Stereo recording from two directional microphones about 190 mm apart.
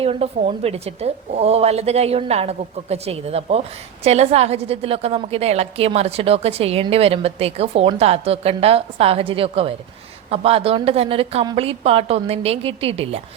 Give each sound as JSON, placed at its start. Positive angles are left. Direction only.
{"t": 0.0, "sound": "a woman's voice", "side_deg": -30}